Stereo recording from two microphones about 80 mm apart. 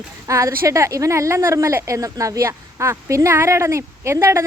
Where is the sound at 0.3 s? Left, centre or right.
Right.